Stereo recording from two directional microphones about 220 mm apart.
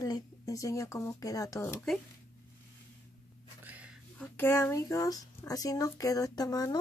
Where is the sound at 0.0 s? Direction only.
15° left (ahead or behind).